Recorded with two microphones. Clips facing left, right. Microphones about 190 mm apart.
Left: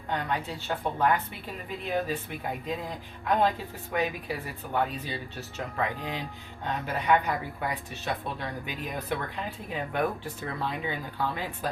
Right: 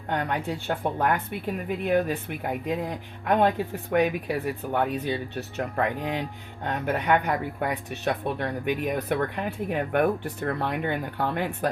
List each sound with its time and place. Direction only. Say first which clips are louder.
0.1 s speech: right 3 dB; 55° right (ahead or behind)
3.9 s speech: right 7 dB; 60° right (ahead or behind)